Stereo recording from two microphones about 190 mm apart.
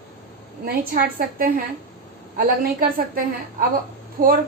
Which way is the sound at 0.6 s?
50° right (ahead or behind).